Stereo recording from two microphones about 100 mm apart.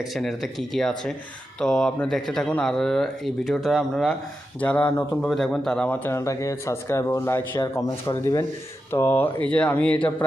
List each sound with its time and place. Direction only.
0.1 s speech: centre (ahead or behind)
4.6 s a man's voice: 15° left (ahead or behind)
6.1 s speech: 30° left (ahead or behind)
8.9 s a man's voice: 25° left (ahead or behind)